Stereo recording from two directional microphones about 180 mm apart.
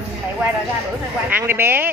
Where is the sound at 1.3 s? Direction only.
10° right (ahead or behind).